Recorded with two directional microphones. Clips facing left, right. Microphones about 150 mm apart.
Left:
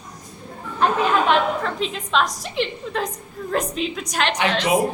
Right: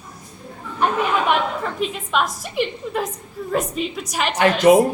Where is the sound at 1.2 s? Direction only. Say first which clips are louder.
Left 1 dB; 5° right (ahead or behind).